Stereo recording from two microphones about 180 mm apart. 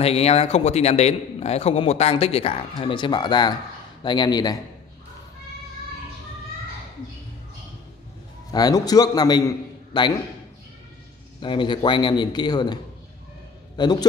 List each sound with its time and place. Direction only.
0.0 s a man's voice: 35° left (ahead or behind)
8.5 s a man's voice: 20° left (ahead or behind)
11.4 s a man's voice: 25° left (ahead or behind)
13.7 s a man's voice: 25° left (ahead or behind)